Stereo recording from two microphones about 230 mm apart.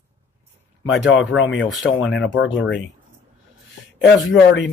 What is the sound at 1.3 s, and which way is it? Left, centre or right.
Speech, left.